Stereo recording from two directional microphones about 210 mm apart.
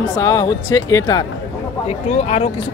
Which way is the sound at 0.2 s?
15° left (ahead or behind).